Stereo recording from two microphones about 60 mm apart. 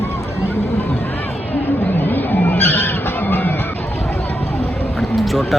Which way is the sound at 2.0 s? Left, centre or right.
Left.